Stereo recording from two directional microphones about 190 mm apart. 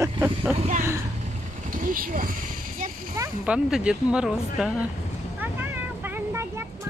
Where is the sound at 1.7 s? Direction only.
45° right (ahead or behind).